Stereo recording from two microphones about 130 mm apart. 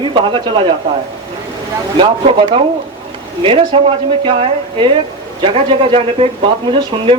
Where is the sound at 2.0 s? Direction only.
40° right (ahead or behind).